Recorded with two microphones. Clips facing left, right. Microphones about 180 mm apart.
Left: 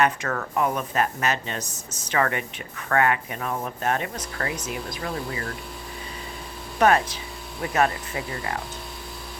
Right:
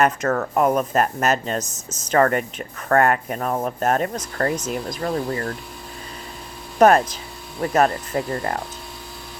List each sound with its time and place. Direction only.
0.0 s speech: 45° right (ahead or behind)
6.7 s speech: 45° right (ahead or behind)